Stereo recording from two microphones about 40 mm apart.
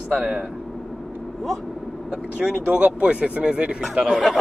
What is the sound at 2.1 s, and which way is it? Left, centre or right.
Speech, right.